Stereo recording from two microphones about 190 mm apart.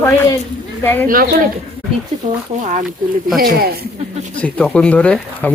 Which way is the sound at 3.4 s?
50° right (ahead or behind).